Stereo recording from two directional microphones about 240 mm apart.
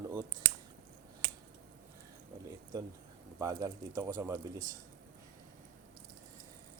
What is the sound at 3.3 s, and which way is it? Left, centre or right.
Speech, centre.